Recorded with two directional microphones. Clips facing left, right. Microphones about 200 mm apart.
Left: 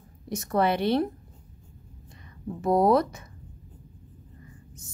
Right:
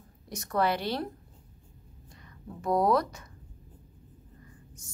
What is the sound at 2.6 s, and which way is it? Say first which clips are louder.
Speech: left 4 dB; 25° left (ahead or behind).